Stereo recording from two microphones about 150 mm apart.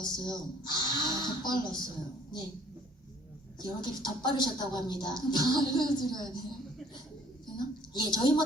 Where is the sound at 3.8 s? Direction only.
30° left (ahead or behind).